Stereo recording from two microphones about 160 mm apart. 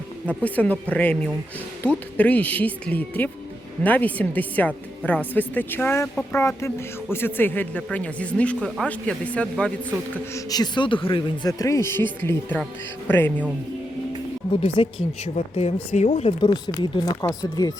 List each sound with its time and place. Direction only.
0.3 s speech: 10° left (ahead or behind)
10.3 s speech: 25° left (ahead or behind)
11.6 s speech: 20° left (ahead or behind)
14.8 s speech: 35° left (ahead or behind)
16.5 s speech: 25° left (ahead or behind)